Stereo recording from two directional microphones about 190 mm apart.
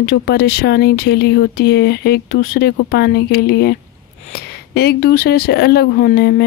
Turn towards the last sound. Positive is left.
turn(degrees=55)  # may be behind; listen again after turning